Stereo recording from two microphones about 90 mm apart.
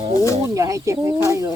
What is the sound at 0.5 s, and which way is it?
Speech, 35° right (ahead or behind).